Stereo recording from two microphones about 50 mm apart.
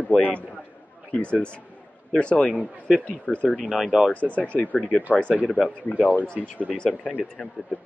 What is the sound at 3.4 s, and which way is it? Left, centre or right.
Speech, centre.